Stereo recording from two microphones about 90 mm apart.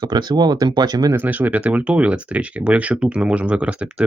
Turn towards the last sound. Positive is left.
turn(degrees=-15)  # may be behind; listen again after turning